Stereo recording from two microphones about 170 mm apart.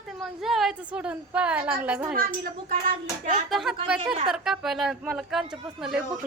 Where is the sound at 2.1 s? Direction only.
60° right (ahead or behind).